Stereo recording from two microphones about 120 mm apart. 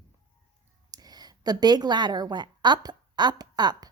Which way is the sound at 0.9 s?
35° right (ahead or behind).